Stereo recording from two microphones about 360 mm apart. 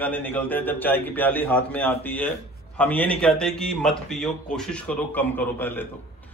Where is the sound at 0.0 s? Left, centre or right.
Centre.